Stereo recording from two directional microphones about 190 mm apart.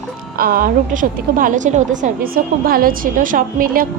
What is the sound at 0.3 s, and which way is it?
A woman's voice, 50° right (ahead or behind).